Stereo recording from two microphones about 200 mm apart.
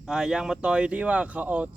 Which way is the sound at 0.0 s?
5° right (ahead or behind).